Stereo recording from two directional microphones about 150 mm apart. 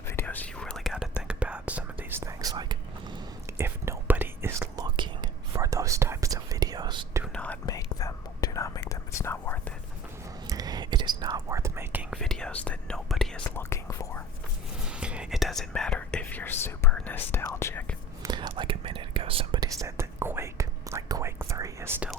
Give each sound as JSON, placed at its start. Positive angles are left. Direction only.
{"t": 0.2, "sound": "whispering", "side_deg": 10}
{"t": 1.3, "sound": "whispering", "side_deg": -10}
{"t": 3.6, "sound": "whispering", "side_deg": -15}
{"t": 7.3, "sound": "whispering", "side_deg": 10}
{"t": 7.7, "sound": "whispering", "side_deg": 20}
{"t": 10.5, "sound": "whispering", "side_deg": -25}
{"t": 12.1, "sound": "whispering", "side_deg": 5}
{"t": 13.6, "sound": "whispering", "side_deg": 20}
{"t": 14.8, "sound": "whispering", "side_deg": -5}
{"t": 18.2, "sound": "whispering", "side_deg": -30}
{"t": 19.5, "sound": "whispering", "side_deg": -20}